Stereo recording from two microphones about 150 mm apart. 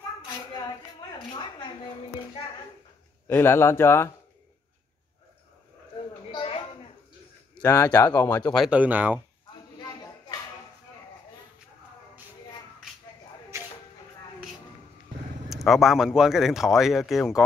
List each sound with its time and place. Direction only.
3.3 s speech: 15° left (ahead or behind)
6.3 s a sound: 35° left (ahead or behind)
7.5 s speech: 15° left (ahead or behind)
8.6 s speech: 10° right (ahead or behind)
15.5 s speech: centre (ahead or behind)